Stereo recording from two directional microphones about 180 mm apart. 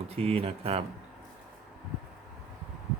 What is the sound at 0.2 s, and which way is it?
Speech, 30° right (ahead or behind).